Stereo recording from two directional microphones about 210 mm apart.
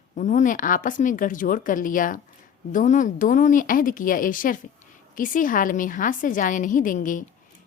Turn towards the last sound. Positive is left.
turn(degrees=40)  # may be behind; listen again after turning